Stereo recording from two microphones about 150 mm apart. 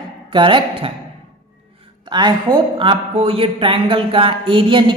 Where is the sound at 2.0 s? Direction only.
30° right (ahead or behind).